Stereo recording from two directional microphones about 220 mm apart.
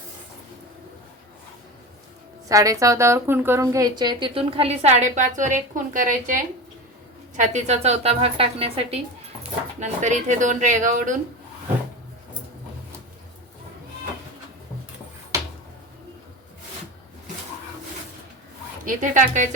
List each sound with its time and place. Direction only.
2.5 s a woman's voice: 15° right (ahead or behind); by 11.2 s 35° right (ahead or behind)
18.9 s speech: 35° right (ahead or behind)